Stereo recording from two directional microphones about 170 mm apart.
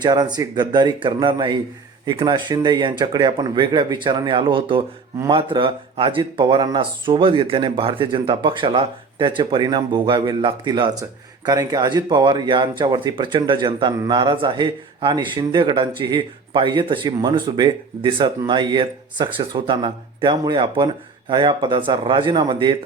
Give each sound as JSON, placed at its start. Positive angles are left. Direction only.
{"t": 0.0, "sound": "speech", "side_deg": -25}